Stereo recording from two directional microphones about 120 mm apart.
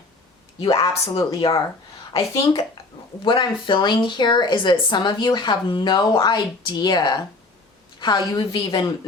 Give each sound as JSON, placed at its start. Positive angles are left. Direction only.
{"t": 1.1, "sound": "a woman's voice", "side_deg": 40}
{"t": 3.2, "sound": "a woman's voice", "side_deg": 40}